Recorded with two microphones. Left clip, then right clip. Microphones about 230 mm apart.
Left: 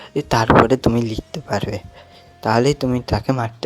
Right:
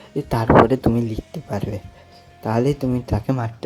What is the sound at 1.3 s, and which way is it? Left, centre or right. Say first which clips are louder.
Speech: left 5 dB; left.